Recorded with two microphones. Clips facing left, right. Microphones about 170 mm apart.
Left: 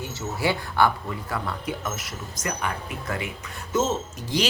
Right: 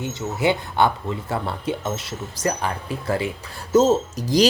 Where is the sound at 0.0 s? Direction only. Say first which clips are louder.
Right 5 dB; 20° right (ahead or behind).